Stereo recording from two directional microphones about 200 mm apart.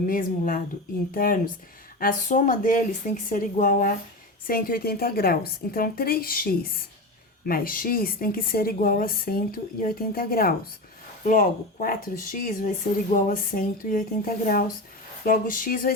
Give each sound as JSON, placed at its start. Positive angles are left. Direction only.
{"t": 0.0, "sound": "speech", "side_deg": 45}